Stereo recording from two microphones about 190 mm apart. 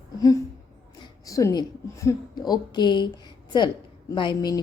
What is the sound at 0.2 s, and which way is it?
A woman's voice, 20° left (ahead or behind).